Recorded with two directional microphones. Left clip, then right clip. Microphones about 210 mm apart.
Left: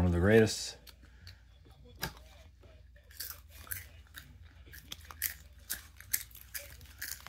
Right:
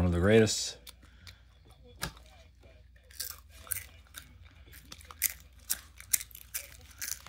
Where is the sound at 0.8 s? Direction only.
50° right (ahead or behind).